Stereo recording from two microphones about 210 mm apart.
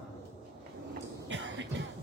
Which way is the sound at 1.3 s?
60° right (ahead or behind).